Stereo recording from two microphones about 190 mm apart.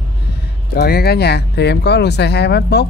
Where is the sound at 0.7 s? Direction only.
55° left (ahead or behind).